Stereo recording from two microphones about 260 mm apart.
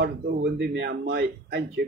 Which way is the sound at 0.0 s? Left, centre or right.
Right.